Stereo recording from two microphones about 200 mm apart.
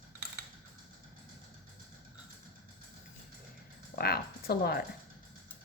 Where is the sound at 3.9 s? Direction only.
50° left (ahead or behind).